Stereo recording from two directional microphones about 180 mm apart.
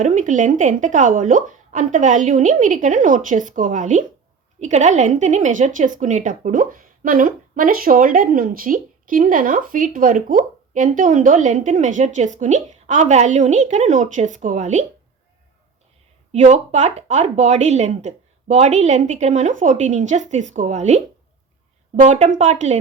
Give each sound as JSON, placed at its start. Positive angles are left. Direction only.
{"t": 0.0, "sound": "speech", "side_deg": -45}
{"t": 16.3, "sound": "speech", "side_deg": -40}